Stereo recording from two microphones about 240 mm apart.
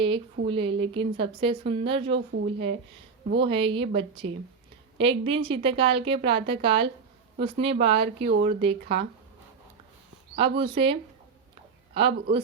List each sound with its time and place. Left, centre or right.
0.0 s a woman's voice: right
3.3 s a woman's voice: right
10.3 s a woman's voice: right
11.9 s a woman's voice: right